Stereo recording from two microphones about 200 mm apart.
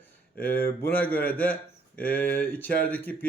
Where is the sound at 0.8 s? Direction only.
10° left (ahead or behind).